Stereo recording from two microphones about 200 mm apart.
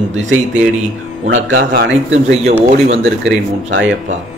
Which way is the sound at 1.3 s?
70° right (ahead or behind).